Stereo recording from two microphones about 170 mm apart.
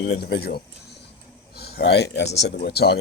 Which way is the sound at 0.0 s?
75° left (ahead or behind).